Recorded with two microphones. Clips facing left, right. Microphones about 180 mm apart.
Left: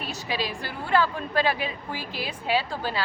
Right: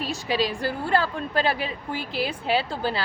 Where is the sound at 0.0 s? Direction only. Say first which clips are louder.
Right 5 dB; 30° right (ahead or behind).